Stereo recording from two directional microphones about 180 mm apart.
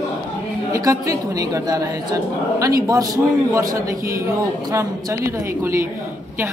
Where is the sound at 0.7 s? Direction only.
20° right (ahead or behind).